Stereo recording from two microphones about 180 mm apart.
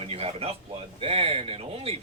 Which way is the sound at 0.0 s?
35° right (ahead or behind).